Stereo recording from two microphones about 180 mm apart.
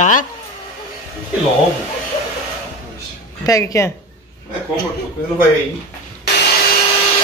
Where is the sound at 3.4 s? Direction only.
20° left (ahead or behind).